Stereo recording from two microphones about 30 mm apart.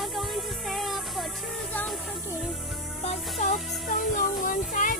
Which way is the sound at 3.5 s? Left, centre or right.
Centre.